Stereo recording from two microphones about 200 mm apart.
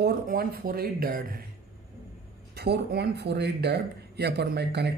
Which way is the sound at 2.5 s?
55° right (ahead or behind).